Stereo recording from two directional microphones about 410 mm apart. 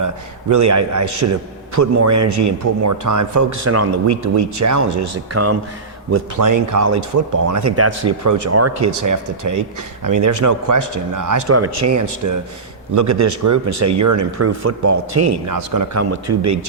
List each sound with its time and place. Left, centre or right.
0.5 s a man's voice: right